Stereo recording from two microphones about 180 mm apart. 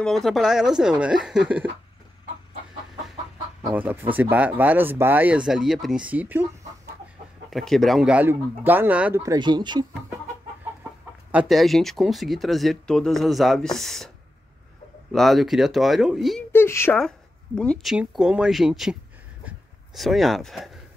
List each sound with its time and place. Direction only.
0.0 s speech: centre (ahead or behind)
3.7 s speech: 10° right (ahead or behind)
7.5 s speech: centre (ahead or behind)
9.2 s speech: 20° right (ahead or behind)
11.3 s speech: centre (ahead or behind)
15.1 s speech: centre (ahead or behind)
16.5 s a woman's voice: 15° left (ahead or behind)
17.6 s speech: 5° left (ahead or behind)
19.4 s a sound: centre (ahead or behind)